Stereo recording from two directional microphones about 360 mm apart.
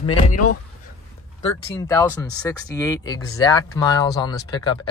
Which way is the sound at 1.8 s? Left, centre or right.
Centre.